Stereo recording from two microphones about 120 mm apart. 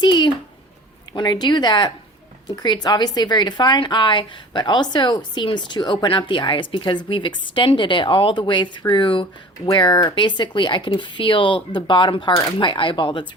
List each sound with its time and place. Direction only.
0.0 s a child's voice: 40° left (ahead or behind)